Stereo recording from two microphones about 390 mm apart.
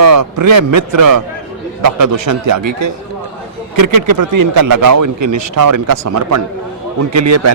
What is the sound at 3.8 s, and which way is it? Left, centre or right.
A man's voice, right.